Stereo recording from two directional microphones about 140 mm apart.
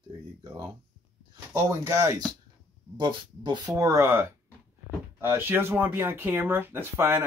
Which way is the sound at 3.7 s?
25° right (ahead or behind).